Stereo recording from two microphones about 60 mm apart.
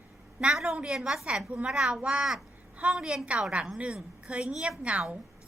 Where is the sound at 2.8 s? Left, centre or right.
Right.